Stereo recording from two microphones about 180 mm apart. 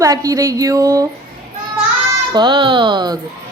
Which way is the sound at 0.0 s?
20° right (ahead or behind).